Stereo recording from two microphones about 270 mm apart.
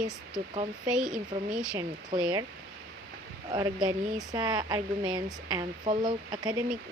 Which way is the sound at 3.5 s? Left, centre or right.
Centre.